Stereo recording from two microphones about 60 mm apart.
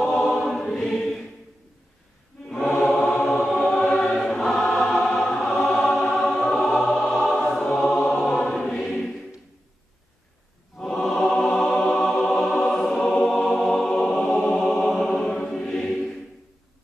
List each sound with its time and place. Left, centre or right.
0.2 s choir: centre
2.4 s choir: centre
3.0 s a sound: centre
3.7 s choir: centre
4.2 s choir: centre
5.7 s music: centre
10.8 s choir: centre
11.5 s music: centre
14.6 s choir: centre